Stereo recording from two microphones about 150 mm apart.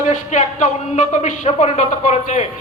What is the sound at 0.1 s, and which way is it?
Speech, 55° left (ahead or behind).